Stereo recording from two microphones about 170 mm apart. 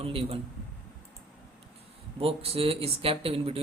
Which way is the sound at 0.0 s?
35° right (ahead or behind).